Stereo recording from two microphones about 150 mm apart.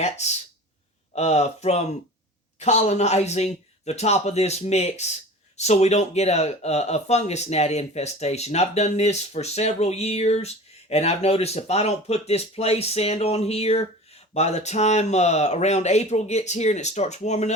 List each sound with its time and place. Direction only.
0.0 s speech: 50° left (ahead or behind)